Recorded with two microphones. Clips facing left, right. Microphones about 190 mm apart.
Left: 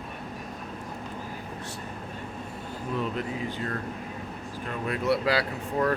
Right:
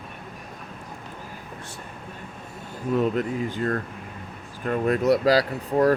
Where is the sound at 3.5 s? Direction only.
45° right (ahead or behind).